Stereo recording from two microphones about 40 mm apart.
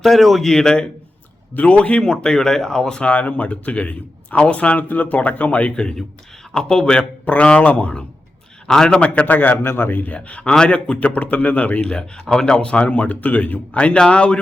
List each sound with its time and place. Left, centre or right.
0.0 s a man's voice: centre
1.5 s speech: left
3.1 s a man's voice: left
4.8 s a man's voice: left
6.6 s speech: centre
7.3 s a man's voice: left
8.6 s a man's voice: centre
9.0 s a man's voice: left
9.2 s a man's voice: left
9.6 s a man's voice: left
10.2 s a man's voice: left
11.9 s a man's voice: left
13.7 s speech: left